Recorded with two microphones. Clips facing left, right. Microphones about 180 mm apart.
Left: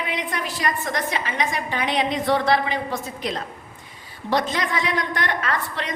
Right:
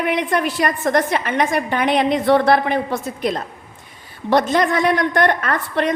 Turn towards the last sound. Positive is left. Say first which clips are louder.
# right 7 dB
turn(degrees=-55)  # may be behind; listen again after turning